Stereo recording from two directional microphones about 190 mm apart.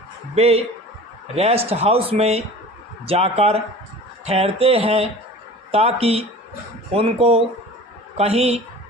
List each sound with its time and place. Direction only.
0.3 s speech: 30° right (ahead or behind)